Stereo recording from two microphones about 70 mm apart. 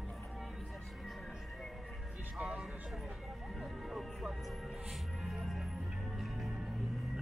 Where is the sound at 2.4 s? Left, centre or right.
Centre.